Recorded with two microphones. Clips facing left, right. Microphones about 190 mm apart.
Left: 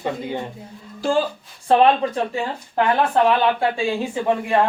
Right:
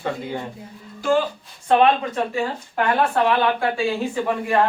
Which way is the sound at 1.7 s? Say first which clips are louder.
Left 1 dB; 35° left (ahead or behind).